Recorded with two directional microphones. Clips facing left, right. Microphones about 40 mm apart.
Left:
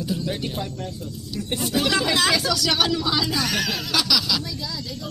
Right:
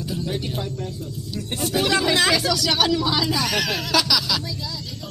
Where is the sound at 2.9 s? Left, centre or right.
Centre.